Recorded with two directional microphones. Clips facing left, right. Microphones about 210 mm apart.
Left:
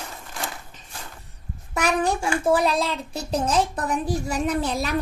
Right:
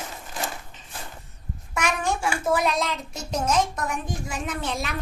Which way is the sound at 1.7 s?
35° left (ahead or behind).